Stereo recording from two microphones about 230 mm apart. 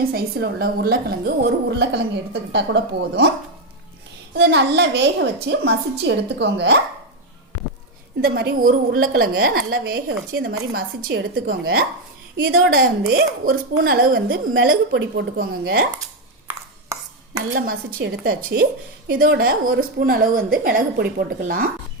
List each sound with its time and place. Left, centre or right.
0.0 s a woman's voice: right
4.4 s a woman's voice: right
8.2 s a woman's voice: right
17.5 s a woman's voice: right